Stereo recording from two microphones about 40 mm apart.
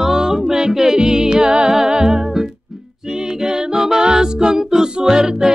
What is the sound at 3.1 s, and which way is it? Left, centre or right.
A capella, centre.